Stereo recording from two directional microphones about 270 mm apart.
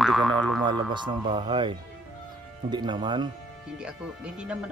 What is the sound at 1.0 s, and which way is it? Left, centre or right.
Speech, centre.